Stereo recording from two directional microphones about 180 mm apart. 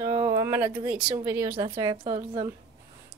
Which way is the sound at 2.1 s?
35° right (ahead or behind).